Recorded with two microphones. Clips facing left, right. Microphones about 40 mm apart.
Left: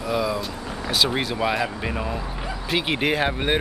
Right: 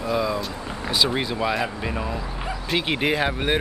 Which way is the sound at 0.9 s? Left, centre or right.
Centre.